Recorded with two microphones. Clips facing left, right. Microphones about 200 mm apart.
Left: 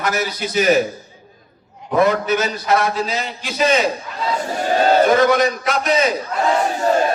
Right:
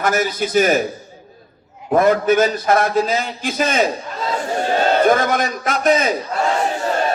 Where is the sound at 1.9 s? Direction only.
50° right (ahead or behind).